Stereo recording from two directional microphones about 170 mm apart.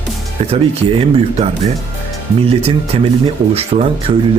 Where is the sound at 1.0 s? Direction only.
35° right (ahead or behind).